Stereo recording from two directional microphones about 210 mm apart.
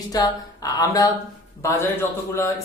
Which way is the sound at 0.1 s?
15° left (ahead or behind).